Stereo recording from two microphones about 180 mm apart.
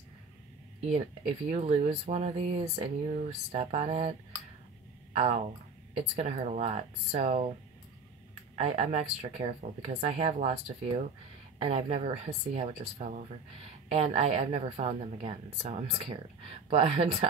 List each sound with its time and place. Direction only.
0.9 s speech: 35° right (ahead or behind)
5.1 s speech: 40° right (ahead or behind)
8.5 s speech: 35° right (ahead or behind)